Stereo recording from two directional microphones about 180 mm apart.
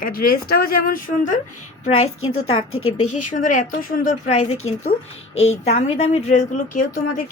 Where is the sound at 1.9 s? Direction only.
30° left (ahead or behind).